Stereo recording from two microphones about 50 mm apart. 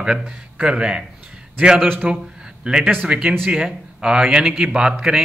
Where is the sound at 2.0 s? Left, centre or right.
Right.